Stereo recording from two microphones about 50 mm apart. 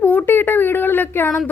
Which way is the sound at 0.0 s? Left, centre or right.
Left.